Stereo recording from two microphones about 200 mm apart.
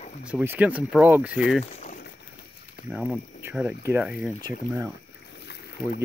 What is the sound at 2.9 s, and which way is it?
Speech, 5° right (ahead or behind).